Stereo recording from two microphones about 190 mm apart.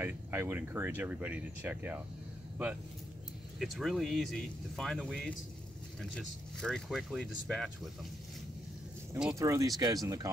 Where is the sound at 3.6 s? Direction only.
Centre (ahead or behind).